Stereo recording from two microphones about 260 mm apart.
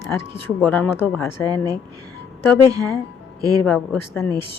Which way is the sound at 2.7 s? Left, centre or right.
Left.